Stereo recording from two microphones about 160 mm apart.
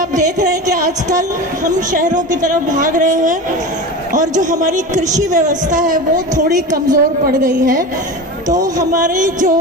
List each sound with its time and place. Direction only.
1.6 s a woman's voice: 55° right (ahead or behind)
9.0 s a woman's voice: 55° right (ahead or behind)